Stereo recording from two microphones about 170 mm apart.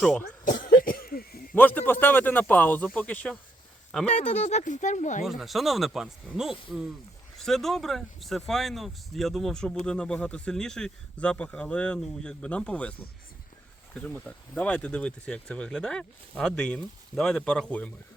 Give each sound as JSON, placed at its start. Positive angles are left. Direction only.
{"t": 0.0, "sound": "speech", "side_deg": 5}
{"t": 0.4, "sound": "cough", "side_deg": 55}
{"t": 1.5, "sound": "speech", "side_deg": 10}
{"t": 4.1, "sound": "speech", "side_deg": 45}
{"t": 5.4, "sound": "speech", "side_deg": 0}